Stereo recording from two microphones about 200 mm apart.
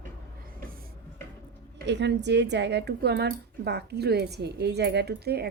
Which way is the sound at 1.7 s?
60° right (ahead or behind).